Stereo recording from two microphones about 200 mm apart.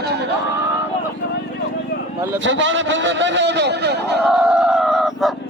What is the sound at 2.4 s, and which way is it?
A man's voice, 70° right (ahead or behind).